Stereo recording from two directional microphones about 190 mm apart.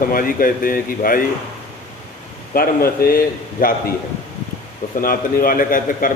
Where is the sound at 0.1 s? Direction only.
50° left (ahead or behind).